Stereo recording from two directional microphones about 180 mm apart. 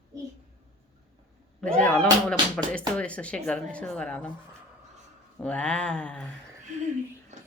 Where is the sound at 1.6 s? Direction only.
5° left (ahead or behind).